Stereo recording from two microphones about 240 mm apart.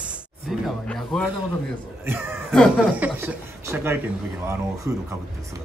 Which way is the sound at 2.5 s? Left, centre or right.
Centre.